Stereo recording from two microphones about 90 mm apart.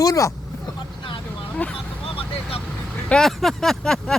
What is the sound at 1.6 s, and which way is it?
Speech, 15° left (ahead or behind).